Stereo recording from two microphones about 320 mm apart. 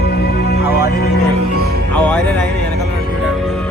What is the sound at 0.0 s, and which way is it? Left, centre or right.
Music, left.